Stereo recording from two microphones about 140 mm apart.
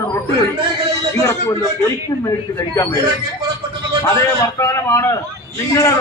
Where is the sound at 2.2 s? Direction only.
25° left (ahead or behind).